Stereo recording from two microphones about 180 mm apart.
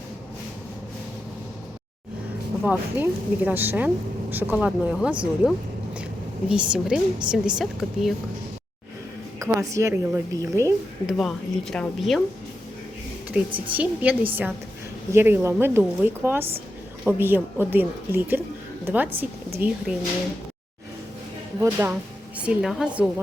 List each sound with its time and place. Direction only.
2.6 s a woman's voice: 10° right (ahead or behind)
9.4 s a woman's voice: 15° right (ahead or behind)
11.0 s a woman's voice: centre (ahead or behind)
13.3 s a woman's voice: 10° right (ahead or behind)
21.6 s a woman's voice: 15° right (ahead or behind)